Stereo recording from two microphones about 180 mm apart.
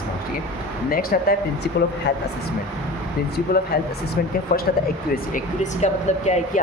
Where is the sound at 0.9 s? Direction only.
55° left (ahead or behind).